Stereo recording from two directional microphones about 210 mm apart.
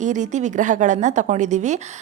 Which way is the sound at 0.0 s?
35° right (ahead or behind).